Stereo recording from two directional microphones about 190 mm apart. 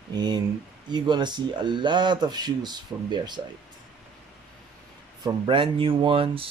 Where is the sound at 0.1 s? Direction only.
20° right (ahead or behind).